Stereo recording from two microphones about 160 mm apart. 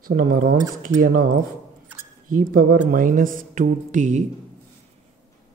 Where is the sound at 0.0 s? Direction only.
65° right (ahead or behind).